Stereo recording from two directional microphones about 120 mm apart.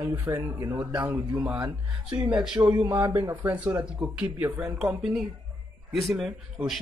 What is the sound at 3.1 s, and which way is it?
Speech, 20° right (ahead or behind).